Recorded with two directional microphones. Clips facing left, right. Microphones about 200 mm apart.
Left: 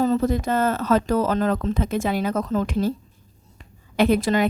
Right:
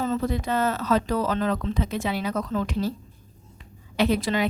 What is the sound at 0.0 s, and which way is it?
Speech, 40° left (ahead or behind).